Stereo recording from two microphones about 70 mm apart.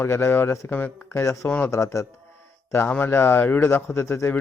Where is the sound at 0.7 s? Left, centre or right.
Left.